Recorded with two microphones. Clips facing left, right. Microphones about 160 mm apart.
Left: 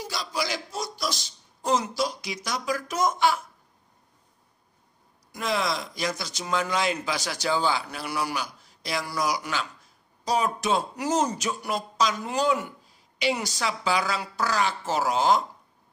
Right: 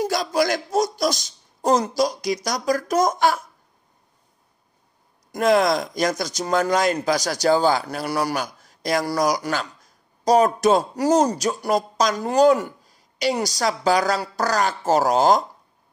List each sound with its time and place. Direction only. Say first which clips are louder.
0.0 s a man's voice: right 10 dB; 50° right (ahead or behind)
5.3 s speech: right 10 dB; 45° right (ahead or behind)